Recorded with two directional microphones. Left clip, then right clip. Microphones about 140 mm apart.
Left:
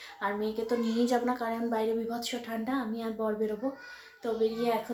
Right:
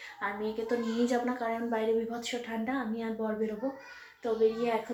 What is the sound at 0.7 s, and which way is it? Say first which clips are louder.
Speech: left 1 dB; 25° left (ahead or behind).